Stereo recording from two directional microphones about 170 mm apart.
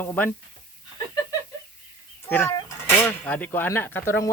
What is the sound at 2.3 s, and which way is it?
Speech, 15° left (ahead or behind).